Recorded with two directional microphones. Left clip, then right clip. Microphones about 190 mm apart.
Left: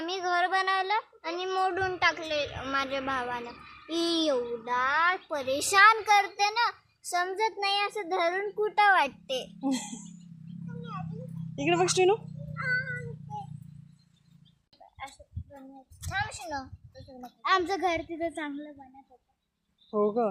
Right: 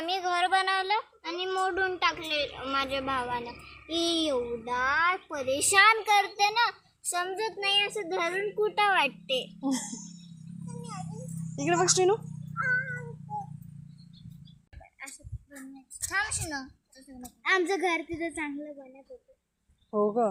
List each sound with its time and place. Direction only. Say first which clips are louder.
0.0 s child singing: even; 20° left (ahead or behind)
4.0 s a child's voice: left 1 dB; 15° left (ahead or behind)
10.7 s music: left 1 dB; 50° right (ahead or behind)
11.5 s speech: even; 5° left (ahead or behind)
12.5 s cat: right 2 dB; 20° right (ahead or behind)
16.0 s speech: right 2 dB; centre (ahead or behind)
17.4 s a child's voice: even; 10° left (ahead or behind)
19.9 s a child's voice: even; 10° left (ahead or behind)